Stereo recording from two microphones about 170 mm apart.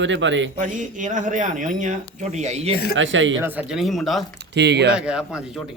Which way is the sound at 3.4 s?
10° right (ahead or behind).